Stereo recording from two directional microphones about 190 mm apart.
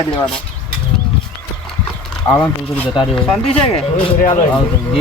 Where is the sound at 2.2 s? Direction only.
10° left (ahead or behind).